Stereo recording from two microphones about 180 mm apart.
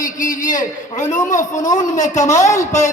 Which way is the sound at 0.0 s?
45° left (ahead or behind).